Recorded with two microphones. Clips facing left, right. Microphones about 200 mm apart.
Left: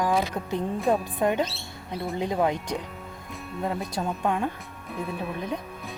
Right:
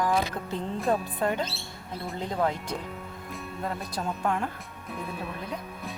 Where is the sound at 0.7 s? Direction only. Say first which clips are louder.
Left 2 dB; centre (ahead or behind).